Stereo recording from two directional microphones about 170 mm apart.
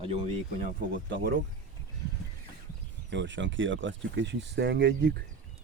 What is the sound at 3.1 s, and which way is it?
Speech, 90° right.